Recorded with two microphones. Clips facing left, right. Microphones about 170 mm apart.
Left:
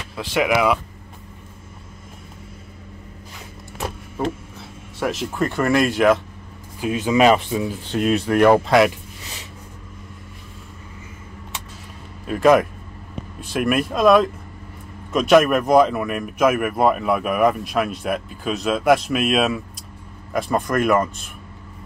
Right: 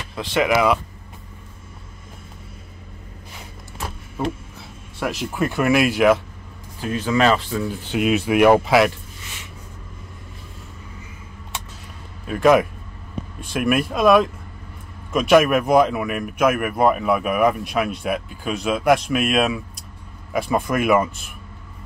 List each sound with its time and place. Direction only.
0.1 s speech: 5° left (ahead or behind)
4.9 s speech: centre (ahead or behind)
6.8 s speech: 15° left (ahead or behind)
7.9 s speech: 5° right (ahead or behind)
12.3 s speech: centre (ahead or behind)